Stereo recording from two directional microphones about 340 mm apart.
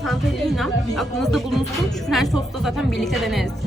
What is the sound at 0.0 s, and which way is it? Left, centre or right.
Speech, centre.